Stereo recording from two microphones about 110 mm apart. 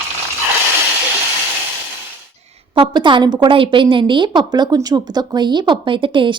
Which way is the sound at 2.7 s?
50° right (ahead or behind).